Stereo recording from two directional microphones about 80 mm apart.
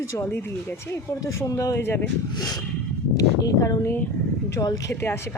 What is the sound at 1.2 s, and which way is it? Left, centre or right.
Speech, left.